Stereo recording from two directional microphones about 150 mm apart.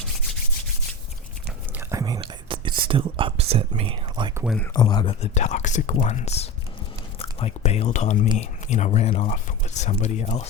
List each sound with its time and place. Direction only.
1.7 s whispering: 20° right (ahead or behind)
2.8 s speech: 35° right (ahead or behind)
4.7 s speech: 25° left (ahead or behind)
5.2 s speech: 50° left (ahead or behind)